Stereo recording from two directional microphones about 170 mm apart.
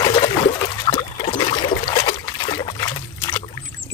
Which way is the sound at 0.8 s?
25° left (ahead or behind).